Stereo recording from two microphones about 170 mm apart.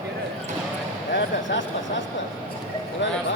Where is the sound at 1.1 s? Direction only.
90° left.